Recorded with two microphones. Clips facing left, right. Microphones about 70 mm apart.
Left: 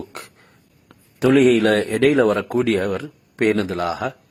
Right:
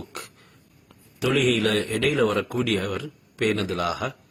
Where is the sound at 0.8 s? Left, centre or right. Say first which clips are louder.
Left 8 dB; left.